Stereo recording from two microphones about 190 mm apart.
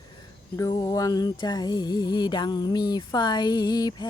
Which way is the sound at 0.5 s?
15° left (ahead or behind).